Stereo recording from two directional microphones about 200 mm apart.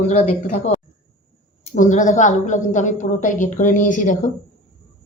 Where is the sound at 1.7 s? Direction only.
40° left (ahead or behind).